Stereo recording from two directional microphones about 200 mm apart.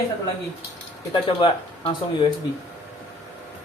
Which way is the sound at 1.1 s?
25° left (ahead or behind).